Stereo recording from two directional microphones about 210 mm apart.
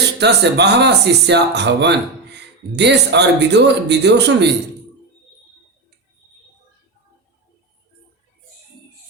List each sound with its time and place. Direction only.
0.2 s speech: 55° right (ahead or behind)